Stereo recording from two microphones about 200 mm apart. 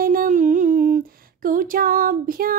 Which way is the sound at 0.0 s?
45° right (ahead or behind).